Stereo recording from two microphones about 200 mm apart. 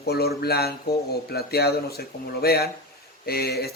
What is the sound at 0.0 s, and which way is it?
Speech, 50° left (ahead or behind).